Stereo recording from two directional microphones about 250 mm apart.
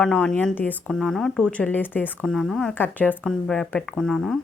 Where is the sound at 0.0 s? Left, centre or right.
Centre.